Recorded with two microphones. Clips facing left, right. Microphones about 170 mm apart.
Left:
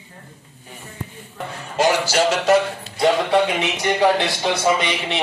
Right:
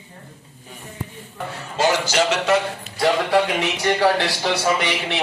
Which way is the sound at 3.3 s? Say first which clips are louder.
Left 1 dB; 20° left (ahead or behind).